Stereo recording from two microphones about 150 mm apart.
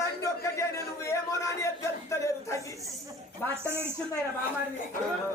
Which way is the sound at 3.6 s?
15° right (ahead or behind).